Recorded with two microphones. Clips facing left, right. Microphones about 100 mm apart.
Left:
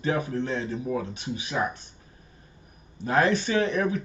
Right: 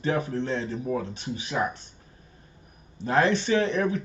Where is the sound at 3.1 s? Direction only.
25° right (ahead or behind).